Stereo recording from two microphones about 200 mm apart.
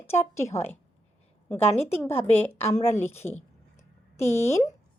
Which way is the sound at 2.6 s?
35° left (ahead or behind).